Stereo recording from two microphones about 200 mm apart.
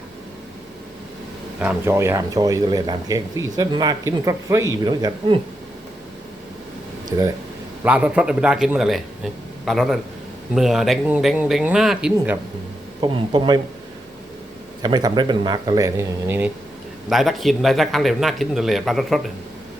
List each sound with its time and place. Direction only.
1.5 s speech: 10° right (ahead or behind)
7.9 s speech: 5° right (ahead or behind)
13.0 s a man's voice: 25° right (ahead or behind)
14.8 s a man's voice: 20° right (ahead or behind)
17.1 s speech: centre (ahead or behind)